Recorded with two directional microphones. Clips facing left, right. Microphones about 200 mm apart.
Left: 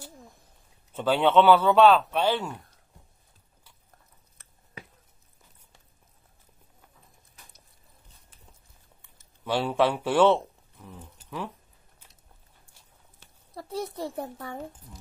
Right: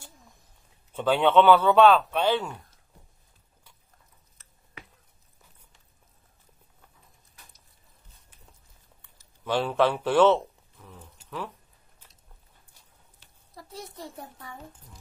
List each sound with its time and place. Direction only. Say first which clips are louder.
0.9 s speech: even; 10° left (ahead or behind)
9.4 s speech: even; 10° left (ahead or behind)
13.6 s a child's voice: left 9 dB; 65° left (ahead or behind)